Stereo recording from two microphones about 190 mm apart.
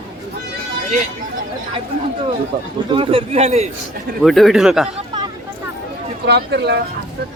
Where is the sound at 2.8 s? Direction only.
25° right (ahead or behind).